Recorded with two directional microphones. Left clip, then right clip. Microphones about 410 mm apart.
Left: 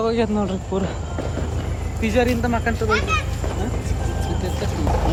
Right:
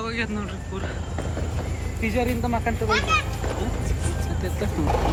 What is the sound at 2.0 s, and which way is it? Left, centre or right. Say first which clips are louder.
Speech: left 5 dB; centre.